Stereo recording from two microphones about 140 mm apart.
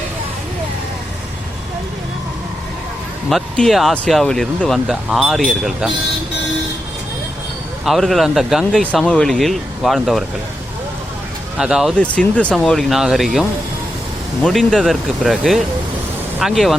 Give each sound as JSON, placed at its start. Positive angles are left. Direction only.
{"t": 3.2, "sound": "speech", "side_deg": 0}
{"t": 7.9, "sound": "speech", "side_deg": 0}
{"t": 11.5, "sound": "speech", "side_deg": -5}
{"t": 12.0, "sound": "speech", "side_deg": 10}